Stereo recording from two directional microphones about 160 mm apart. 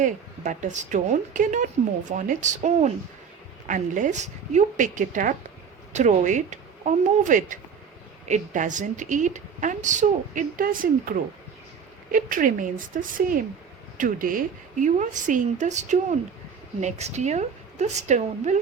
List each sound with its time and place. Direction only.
0.0 s a woman's voice: 50° right (ahead or behind)